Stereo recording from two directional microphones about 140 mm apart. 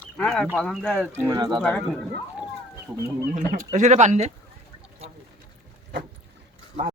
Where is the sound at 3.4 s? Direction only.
65° right (ahead or behind).